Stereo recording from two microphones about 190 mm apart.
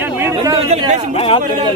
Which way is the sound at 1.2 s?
30° left (ahead or behind).